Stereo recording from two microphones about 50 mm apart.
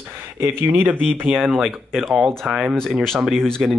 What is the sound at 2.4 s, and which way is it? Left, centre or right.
Speech, centre.